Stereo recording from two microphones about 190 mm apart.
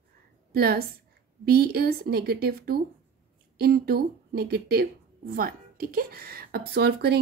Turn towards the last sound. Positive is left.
turn(degrees=-60)  # may be behind; listen again after turning